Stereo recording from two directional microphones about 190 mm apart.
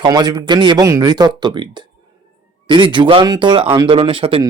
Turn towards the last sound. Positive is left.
turn(degrees=-30)  # may be behind; listen again after turning